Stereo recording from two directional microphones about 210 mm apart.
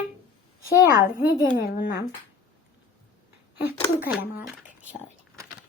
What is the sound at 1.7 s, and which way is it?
Speech, 50° left (ahead or behind).